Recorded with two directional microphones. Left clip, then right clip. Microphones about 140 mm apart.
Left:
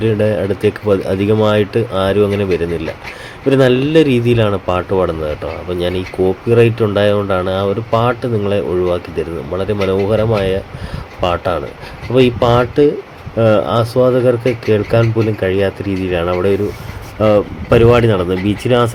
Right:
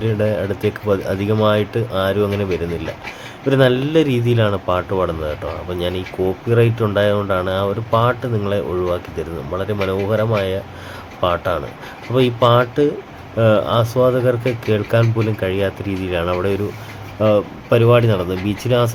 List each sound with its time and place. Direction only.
0.0 s speech: 35° left (ahead or behind); by 18.9 s 15° left (ahead or behind)